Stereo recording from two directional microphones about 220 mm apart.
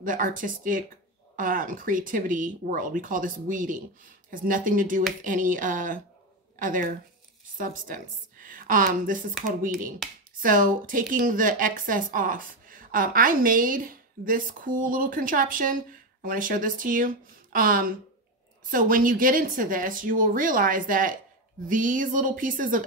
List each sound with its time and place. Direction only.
0.0 s a woman's voice: 40° right (ahead or behind)